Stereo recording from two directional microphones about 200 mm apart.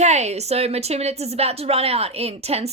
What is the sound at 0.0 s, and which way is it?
A woman's voice, 35° right (ahead or behind).